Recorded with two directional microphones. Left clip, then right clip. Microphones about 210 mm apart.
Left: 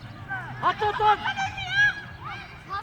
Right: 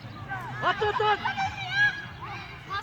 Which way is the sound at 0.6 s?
55° left (ahead or behind).